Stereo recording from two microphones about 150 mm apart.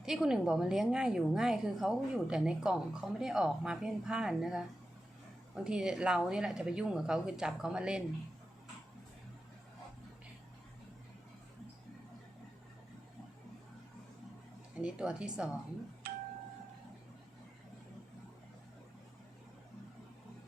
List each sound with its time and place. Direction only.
0.0 s a woman's voice: centre (ahead or behind)
5.6 s a woman's voice: 5° right (ahead or behind)
14.8 s speech: 5° right (ahead or behind)
16.0 s doorbell: 75° right (ahead or behind)